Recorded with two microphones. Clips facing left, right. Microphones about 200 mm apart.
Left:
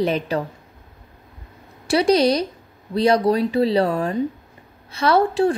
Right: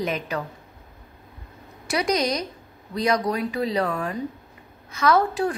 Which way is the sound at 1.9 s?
30° left (ahead or behind).